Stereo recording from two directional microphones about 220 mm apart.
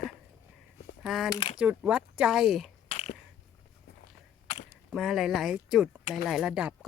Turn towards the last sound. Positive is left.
turn(degrees=-5)  # may be behind; listen again after turning